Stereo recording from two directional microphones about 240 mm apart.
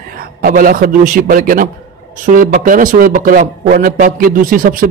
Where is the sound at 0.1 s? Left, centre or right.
Right.